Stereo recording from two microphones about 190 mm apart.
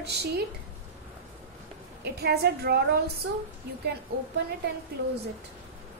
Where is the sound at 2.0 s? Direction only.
60° right (ahead or behind).